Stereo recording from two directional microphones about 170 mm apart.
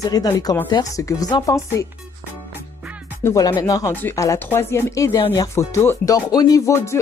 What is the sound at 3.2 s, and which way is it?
Speech, 15° left (ahead or behind).